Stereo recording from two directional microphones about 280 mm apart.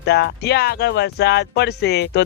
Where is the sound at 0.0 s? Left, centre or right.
Left.